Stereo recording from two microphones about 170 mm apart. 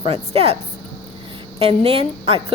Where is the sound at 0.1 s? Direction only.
35° right (ahead or behind).